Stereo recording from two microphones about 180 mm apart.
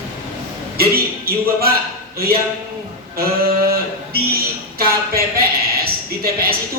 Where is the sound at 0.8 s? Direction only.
55° right (ahead or behind).